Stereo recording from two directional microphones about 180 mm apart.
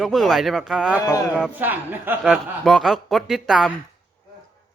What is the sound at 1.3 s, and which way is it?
A man's voice, 5° right (ahead or behind).